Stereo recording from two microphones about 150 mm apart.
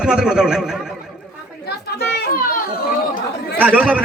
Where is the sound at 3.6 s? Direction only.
10° right (ahead or behind).